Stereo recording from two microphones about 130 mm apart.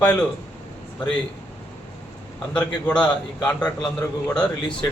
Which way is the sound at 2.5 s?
10° left (ahead or behind).